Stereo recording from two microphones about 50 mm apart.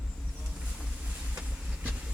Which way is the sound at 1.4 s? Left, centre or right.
Right.